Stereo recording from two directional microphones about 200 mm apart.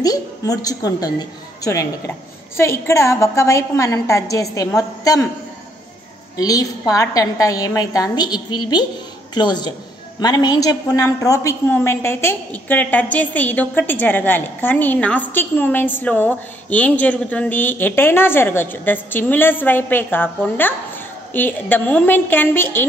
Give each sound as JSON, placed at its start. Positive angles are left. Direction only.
{"t": 0.0, "sound": "a woman's voice", "side_deg": 20}
{"t": 6.3, "sound": "a woman's voice", "side_deg": 15}